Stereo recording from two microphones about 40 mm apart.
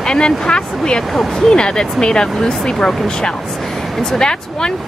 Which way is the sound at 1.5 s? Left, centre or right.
Left.